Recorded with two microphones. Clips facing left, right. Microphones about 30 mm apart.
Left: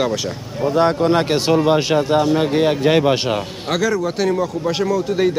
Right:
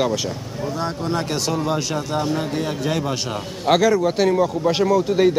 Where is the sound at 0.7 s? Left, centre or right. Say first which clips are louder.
Left 10 dB; left.